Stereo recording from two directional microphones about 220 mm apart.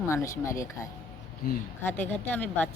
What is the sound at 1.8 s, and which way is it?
Speech, 10° left (ahead or behind).